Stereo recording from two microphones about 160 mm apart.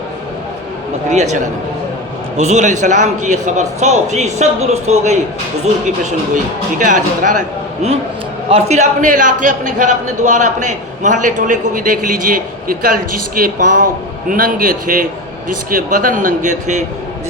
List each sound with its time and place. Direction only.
1.1 s a man's voice: 45° right (ahead or behind)
2.4 s a man's voice: 45° right (ahead or behind)
6.3 s a man's voice: 50° right (ahead or behind)